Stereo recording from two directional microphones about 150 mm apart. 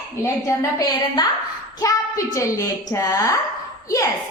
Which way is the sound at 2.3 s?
20° left (ahead or behind).